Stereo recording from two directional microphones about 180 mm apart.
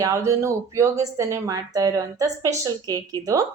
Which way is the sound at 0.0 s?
15° right (ahead or behind).